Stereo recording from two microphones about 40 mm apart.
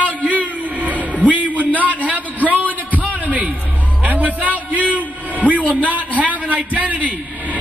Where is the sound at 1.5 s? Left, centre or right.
Left.